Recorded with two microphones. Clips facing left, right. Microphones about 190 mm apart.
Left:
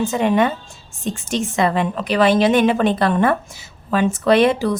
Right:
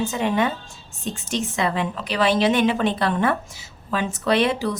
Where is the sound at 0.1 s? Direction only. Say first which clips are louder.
Left 5 dB; 55° left (ahead or behind).